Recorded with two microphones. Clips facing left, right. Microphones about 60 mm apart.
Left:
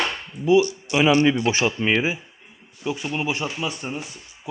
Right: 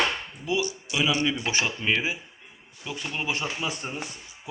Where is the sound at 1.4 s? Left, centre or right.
Left.